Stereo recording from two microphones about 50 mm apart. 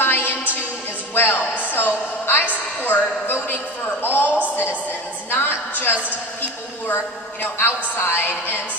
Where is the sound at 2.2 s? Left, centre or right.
Left.